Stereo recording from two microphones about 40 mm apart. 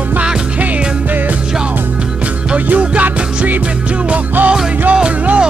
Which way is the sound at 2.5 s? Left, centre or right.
Right.